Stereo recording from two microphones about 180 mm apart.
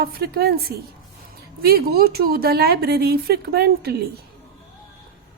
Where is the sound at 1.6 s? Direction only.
60° right (ahead or behind).